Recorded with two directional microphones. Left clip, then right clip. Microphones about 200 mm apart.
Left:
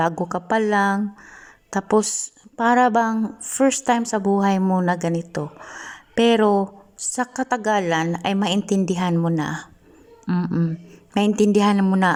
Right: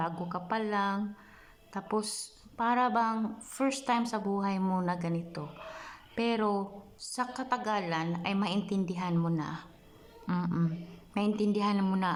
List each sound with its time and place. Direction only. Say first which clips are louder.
0.0 s a woman's voice: left 13 dB; 40° left (ahead or behind)
4.6 s speech: left 11 dB; 30° left (ahead or behind)
10.2 s speech: left 9 dB; 25° left (ahead or behind)
11.3 s speech: left 14 dB; 40° left (ahead or behind)